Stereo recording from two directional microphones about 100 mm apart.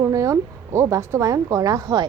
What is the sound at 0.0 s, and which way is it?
A woman's voice, 35° right (ahead or behind).